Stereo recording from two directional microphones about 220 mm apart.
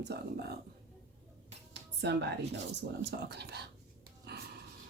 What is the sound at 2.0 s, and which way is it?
Speech, 50° right (ahead or behind).